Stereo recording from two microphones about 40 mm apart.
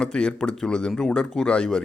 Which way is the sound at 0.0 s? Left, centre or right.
Left.